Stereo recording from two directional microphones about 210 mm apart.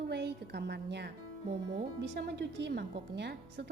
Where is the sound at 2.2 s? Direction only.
55° right (ahead or behind).